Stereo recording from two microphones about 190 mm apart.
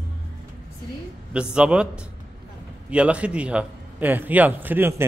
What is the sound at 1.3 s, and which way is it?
A man's voice, 5° right (ahead or behind).